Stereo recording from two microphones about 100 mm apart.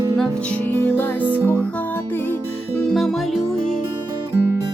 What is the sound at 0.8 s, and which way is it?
Music, 20° left (ahead or behind).